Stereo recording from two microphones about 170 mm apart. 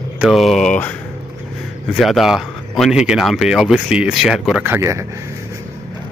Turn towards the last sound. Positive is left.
turn(degrees=-15)  # may be behind; listen again after turning